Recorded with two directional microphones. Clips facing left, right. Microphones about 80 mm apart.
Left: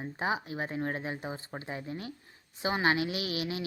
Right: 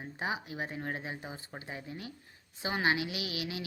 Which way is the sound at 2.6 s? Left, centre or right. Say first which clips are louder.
Left 3 dB; left.